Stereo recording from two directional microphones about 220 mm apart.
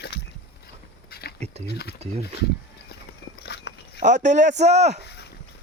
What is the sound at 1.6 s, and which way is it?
Speech, 45° left (ahead or behind).